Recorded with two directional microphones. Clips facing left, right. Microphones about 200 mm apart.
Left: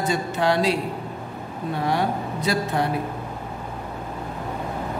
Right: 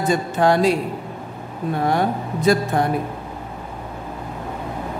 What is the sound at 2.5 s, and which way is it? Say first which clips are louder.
Speech: right 7 dB; 50° right (ahead or behind).